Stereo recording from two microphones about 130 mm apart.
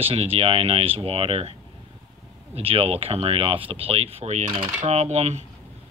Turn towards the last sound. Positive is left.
turn(degrees=-55)  # may be behind; listen again after turning